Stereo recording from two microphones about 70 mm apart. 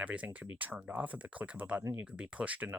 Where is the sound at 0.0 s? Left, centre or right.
Centre.